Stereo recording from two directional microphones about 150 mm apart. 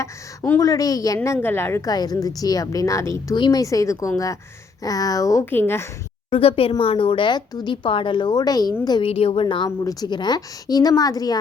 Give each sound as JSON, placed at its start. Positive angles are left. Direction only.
{"t": 0.0, "sound": "a woman's voice", "side_deg": 15}
{"t": 6.3, "sound": "a woman's voice", "side_deg": 40}
{"t": 9.0, "sound": "speech", "side_deg": 40}
{"t": 9.6, "sound": "a woman's voice", "side_deg": 25}